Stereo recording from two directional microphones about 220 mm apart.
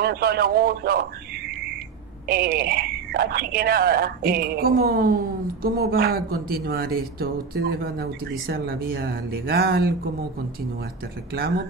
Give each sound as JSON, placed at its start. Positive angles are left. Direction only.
{"t": 0.0, "sound": "speech", "side_deg": -45}
{"t": 2.2, "sound": "speech", "side_deg": -45}